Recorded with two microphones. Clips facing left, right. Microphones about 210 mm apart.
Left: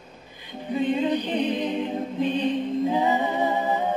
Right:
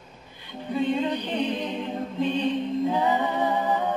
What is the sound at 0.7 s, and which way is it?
Music, 15° left (ahead or behind).